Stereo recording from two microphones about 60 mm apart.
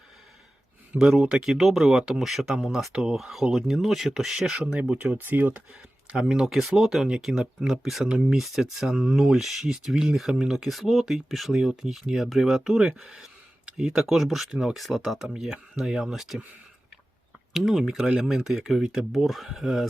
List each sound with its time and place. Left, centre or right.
0.9 s speech: centre
4.6 s speech: centre
5.0 s speech: right
6.1 s speech: centre
8.0 s speech: centre
8.4 s speech: centre
17.5 s speech: centre